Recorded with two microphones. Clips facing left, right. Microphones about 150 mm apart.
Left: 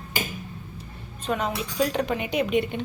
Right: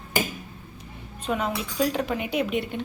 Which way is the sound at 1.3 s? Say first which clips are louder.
Even; centre (ahead or behind).